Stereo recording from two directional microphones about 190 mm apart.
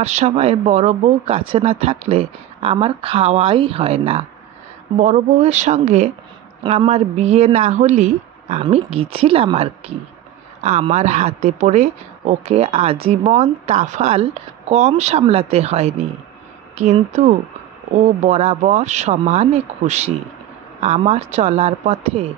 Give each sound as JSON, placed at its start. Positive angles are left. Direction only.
{"t": 0.0, "sound": "speech", "side_deg": -35}